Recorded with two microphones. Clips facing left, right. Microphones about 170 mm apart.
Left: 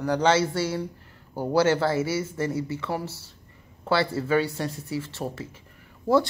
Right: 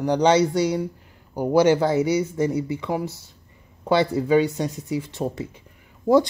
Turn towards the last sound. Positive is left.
turn(degrees=-20)  # may be behind; listen again after turning